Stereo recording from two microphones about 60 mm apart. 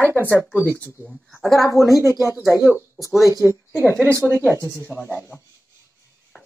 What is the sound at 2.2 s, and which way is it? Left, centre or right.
Speech, left.